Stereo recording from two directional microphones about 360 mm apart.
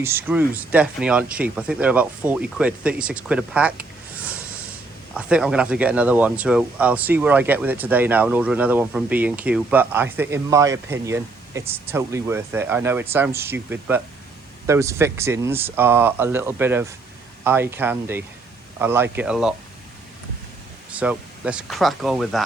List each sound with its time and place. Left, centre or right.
0.0 s speech: centre
5.1 s speech: centre
20.9 s speech: centre